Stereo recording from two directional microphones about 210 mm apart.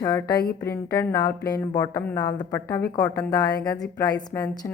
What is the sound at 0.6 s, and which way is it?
Speech, 10° left (ahead or behind).